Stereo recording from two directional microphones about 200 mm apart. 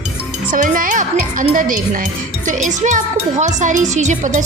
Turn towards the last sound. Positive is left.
turn(degrees=-35)  # may be behind; listen again after turning